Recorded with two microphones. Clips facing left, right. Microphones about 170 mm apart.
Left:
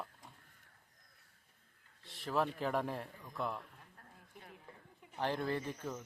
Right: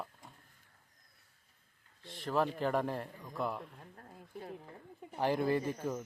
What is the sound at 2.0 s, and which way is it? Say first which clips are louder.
A man's voice: right 3 dB; centre (ahead or behind).